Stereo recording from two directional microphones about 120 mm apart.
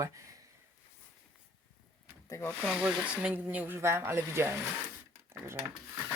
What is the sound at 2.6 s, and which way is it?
Speech, 5° right (ahead or behind).